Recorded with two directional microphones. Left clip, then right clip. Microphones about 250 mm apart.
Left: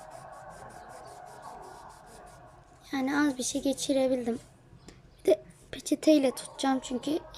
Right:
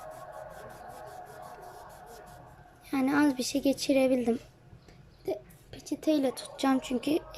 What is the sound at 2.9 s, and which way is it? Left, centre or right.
Speech, centre.